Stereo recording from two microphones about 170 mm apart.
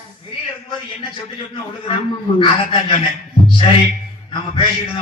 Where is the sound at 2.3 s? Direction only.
30° left (ahead or behind).